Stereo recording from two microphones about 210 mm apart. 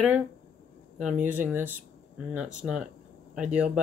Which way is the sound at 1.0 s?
10° right (ahead or behind).